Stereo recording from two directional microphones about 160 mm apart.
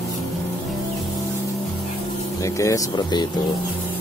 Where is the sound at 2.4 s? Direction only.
20° left (ahead or behind).